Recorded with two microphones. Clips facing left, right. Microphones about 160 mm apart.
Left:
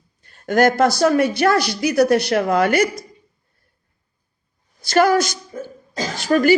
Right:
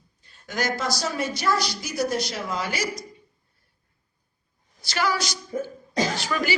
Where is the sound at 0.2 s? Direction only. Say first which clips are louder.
Left 13 dB; 55° left (ahead or behind).